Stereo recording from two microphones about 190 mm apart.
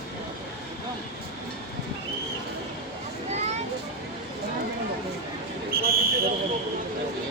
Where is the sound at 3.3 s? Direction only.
35° right (ahead or behind).